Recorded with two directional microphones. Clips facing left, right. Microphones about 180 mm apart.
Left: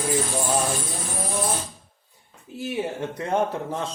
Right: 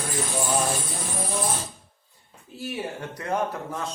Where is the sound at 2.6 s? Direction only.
20° left (ahead or behind).